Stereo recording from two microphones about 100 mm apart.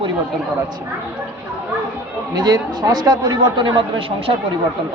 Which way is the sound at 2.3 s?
45° right (ahead or behind).